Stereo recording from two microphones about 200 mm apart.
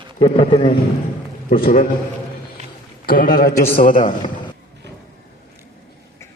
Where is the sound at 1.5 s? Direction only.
45° left (ahead or behind).